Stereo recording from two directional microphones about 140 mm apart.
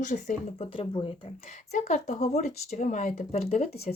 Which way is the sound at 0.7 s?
40° left (ahead or behind).